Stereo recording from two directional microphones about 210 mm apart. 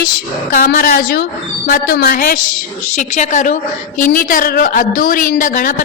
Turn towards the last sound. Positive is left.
turn(degrees=40)  # may be behind; listen again after turning